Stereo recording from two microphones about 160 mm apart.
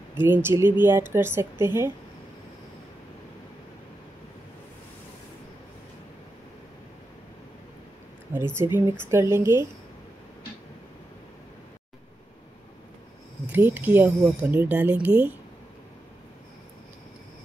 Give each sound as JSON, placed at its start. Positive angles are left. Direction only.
{"t": 0.2, "sound": "speech", "side_deg": -15}
{"t": 8.5, "sound": "speech", "side_deg": -15}
{"t": 13.5, "sound": "speech", "side_deg": -10}